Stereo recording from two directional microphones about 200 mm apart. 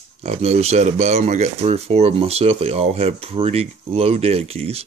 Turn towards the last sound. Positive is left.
turn(degrees=-30)  # may be behind; listen again after turning